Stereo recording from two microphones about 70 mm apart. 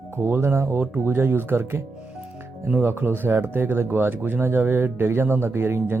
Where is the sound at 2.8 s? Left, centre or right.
Right.